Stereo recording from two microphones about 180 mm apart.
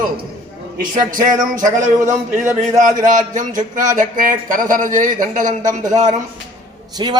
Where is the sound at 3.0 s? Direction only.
45° right (ahead or behind).